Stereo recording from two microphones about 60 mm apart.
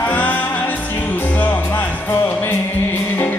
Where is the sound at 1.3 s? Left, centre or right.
Left.